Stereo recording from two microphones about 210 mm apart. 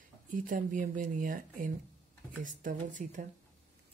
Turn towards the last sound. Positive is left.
turn(degrees=-35)  # may be behind; listen again after turning